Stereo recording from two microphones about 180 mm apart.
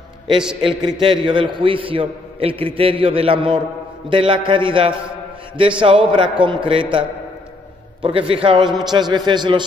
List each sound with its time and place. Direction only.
0.4 s a man's voice: 5° right (ahead or behind)
0.8 s a man's voice: 25° right (ahead or behind)